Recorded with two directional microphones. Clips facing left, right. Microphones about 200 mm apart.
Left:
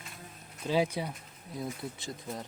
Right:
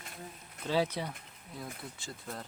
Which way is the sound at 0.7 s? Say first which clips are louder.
Left 2 dB; 10° left (ahead or behind).